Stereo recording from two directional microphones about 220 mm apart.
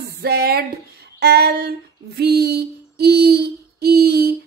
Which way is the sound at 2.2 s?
45° right (ahead or behind).